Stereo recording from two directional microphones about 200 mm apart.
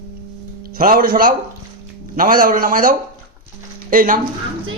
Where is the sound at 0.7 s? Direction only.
45° right (ahead or behind).